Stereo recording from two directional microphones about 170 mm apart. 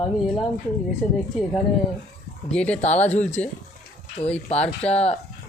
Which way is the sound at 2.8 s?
40° left (ahead or behind).